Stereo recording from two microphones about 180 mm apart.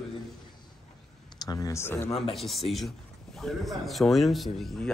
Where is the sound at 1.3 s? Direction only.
20° left (ahead or behind).